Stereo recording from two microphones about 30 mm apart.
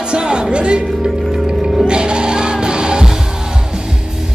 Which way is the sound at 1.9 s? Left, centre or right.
Right.